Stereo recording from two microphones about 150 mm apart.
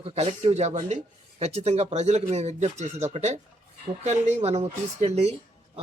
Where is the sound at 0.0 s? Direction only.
40° right (ahead or behind).